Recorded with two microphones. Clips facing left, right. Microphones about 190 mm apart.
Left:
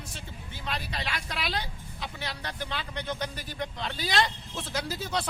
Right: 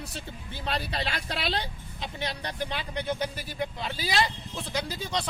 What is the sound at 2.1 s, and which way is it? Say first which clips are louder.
Speech: right 5 dB; 20° right (ahead or behind).